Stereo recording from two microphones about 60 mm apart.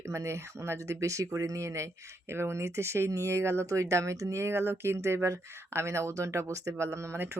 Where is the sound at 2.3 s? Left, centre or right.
Right.